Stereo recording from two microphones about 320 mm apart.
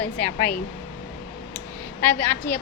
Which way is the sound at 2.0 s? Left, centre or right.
Centre.